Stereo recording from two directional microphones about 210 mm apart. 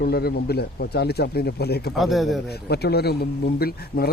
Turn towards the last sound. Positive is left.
turn(degrees=45)  # may be behind; listen again after turning